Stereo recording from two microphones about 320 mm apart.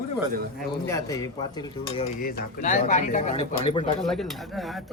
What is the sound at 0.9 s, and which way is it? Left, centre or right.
Cutlery, centre.